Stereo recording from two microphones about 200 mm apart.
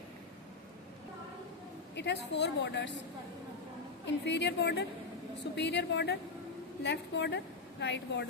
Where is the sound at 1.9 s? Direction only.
60° left (ahead or behind).